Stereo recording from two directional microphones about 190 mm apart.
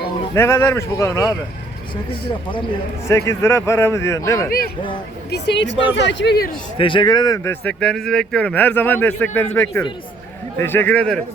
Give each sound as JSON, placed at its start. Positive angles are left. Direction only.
{"t": 0.3, "sound": "speech", "side_deg": 15}
{"t": 2.2, "sound": "speech", "side_deg": 25}
{"t": 3.1, "sound": "speech", "side_deg": 15}
{"t": 5.3, "sound": "a woman's voice", "side_deg": 70}
{"t": 6.7, "sound": "speech", "side_deg": 25}